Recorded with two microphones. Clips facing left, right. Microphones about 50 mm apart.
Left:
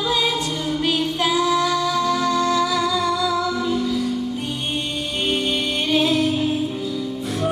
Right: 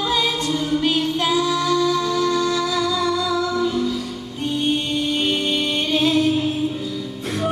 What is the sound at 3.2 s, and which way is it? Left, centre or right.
Music, centre.